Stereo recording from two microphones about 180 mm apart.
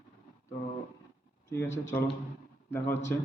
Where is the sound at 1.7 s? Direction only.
90° left.